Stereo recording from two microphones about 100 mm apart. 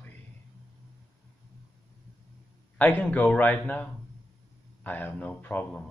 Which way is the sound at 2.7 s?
20° left (ahead or behind).